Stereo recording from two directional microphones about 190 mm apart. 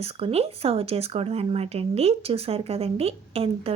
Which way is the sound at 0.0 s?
30° right (ahead or behind).